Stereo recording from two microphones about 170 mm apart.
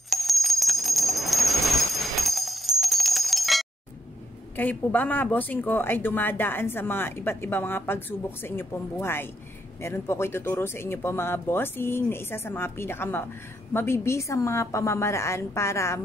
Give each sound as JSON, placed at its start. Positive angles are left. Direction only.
{"t": 0.1, "sound": "bell", "side_deg": 0}
{"t": 4.6, "sound": "speech", "side_deg": 10}